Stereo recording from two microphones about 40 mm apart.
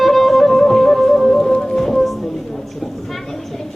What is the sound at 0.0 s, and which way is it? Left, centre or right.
Music, centre.